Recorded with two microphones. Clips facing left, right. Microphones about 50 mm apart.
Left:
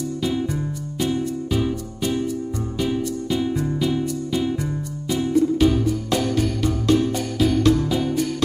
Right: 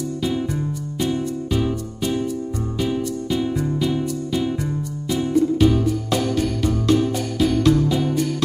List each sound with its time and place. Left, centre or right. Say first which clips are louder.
0.9 s music: even; centre